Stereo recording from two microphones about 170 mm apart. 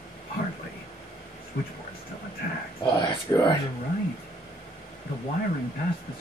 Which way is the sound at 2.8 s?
20° left (ahead or behind).